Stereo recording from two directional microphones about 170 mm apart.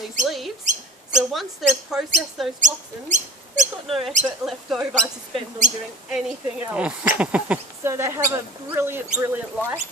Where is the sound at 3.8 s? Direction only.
Centre (ahead or behind).